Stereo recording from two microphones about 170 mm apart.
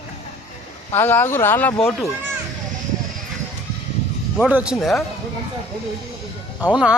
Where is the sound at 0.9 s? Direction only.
15° left (ahead or behind).